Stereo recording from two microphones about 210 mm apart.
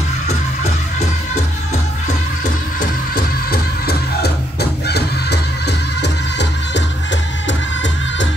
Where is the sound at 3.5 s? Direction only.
45° left (ahead or behind).